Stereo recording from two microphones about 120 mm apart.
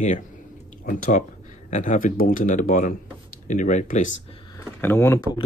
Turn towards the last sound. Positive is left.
turn(degrees=25)  # may be behind; listen again after turning